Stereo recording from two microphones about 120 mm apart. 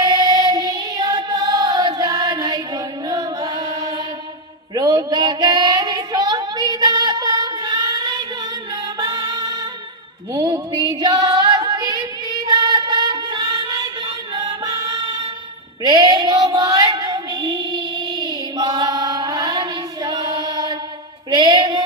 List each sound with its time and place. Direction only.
0.0 s music: 35° right (ahead or behind)
4.7 s female singing: 30° right (ahead or behind)
9.0 s music: 30° right (ahead or behind)
10.3 s female singing: 30° right (ahead or behind)